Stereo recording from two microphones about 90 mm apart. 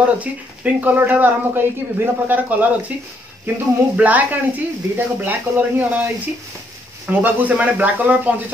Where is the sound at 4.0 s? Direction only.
15° right (ahead or behind).